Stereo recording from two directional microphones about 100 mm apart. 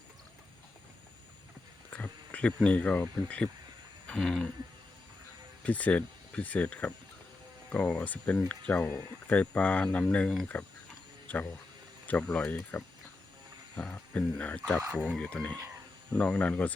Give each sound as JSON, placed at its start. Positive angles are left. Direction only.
{"t": 1.9, "sound": "speech", "side_deg": 15}
{"t": 5.6, "sound": "speech", "side_deg": 15}
{"t": 14.8, "sound": "speech", "side_deg": -15}
{"t": 15.1, "sound": "speech", "side_deg": 10}